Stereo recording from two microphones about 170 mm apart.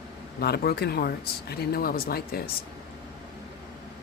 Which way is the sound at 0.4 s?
70° left (ahead or behind).